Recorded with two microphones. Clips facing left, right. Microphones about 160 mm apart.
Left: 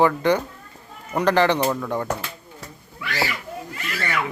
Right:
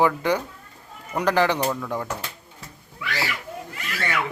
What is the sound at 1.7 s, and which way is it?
Speech, 10° left (ahead or behind).